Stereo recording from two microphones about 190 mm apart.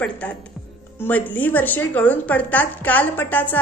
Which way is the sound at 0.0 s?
5° left (ahead or behind).